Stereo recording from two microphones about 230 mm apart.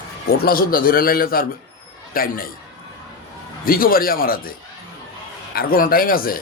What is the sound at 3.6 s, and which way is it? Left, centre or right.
Speech, left.